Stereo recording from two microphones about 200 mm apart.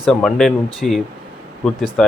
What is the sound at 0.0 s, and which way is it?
Speech, centre (ahead or behind).